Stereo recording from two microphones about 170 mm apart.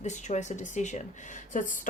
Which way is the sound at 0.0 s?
45° left (ahead or behind).